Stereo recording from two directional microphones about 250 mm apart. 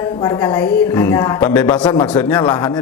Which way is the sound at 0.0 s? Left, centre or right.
Centre.